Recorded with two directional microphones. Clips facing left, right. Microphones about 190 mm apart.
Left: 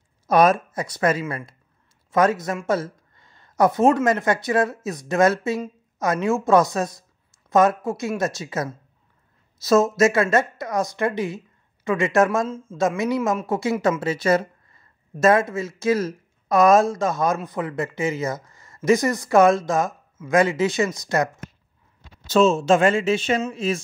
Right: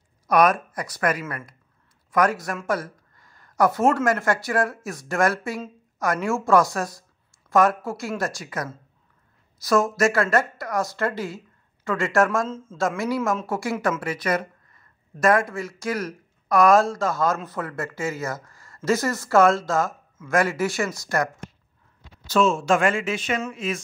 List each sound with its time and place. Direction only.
0.3 s a woman's voice: 25° left (ahead or behind)